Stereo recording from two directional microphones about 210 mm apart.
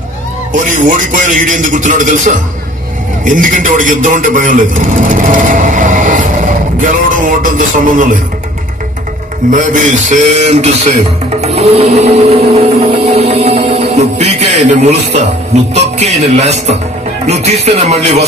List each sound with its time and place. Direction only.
0.5 s music: 40° right (ahead or behind)
3.3 s a man's voice: 40° right (ahead or behind)
7.2 s music: 40° right (ahead or behind)
9.5 s music: 35° right (ahead or behind)